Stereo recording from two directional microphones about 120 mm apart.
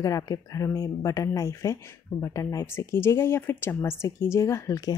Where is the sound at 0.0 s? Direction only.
30° left (ahead or behind).